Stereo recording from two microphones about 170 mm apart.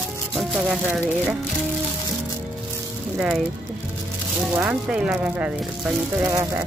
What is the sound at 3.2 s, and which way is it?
Speech, 5° right (ahead or behind).